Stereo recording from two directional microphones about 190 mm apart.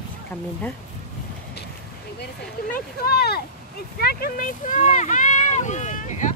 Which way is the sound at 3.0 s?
55° left (ahead or behind).